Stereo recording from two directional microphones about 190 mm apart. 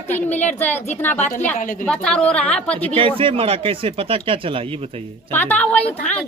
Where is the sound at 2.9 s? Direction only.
30° right (ahead or behind).